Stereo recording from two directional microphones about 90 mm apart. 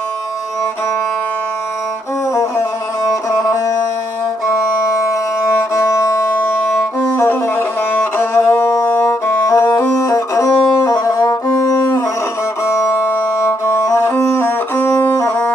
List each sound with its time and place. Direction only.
4.9 s music: 35° left (ahead or behind)
7.9 s music: 25° left (ahead or behind)